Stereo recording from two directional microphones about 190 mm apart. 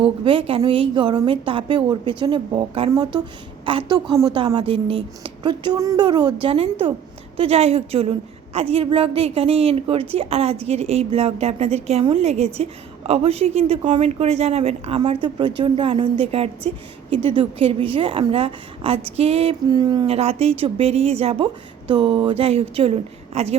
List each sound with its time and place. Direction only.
0.0 s a woman's voice: 25° right (ahead or behind)